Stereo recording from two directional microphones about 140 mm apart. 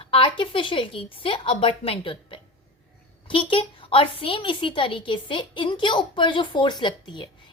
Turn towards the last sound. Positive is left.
turn(degrees=35)  # may be behind; listen again after turning